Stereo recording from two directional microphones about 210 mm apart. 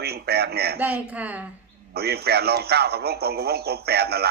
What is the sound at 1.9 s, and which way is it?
Speech, 50° right (ahead or behind).